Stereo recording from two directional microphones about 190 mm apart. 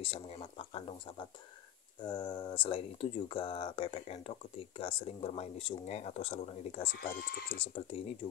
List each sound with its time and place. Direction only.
0.0 s a sound: 30° left (ahead or behind)
2.0 s speech: 25° left (ahead or behind)
7.0 s speech: 50° left (ahead or behind)
7.5 s speech: 30° left (ahead or behind)